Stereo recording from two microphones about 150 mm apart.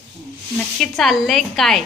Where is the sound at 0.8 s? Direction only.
Centre (ahead or behind).